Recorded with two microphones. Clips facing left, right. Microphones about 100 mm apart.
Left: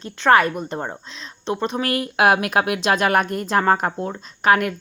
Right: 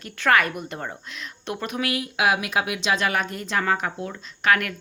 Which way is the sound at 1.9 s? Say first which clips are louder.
Left 5 dB; 50° left (ahead or behind).